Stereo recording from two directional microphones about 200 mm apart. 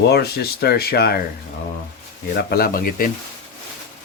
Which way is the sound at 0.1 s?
50° left (ahead or behind).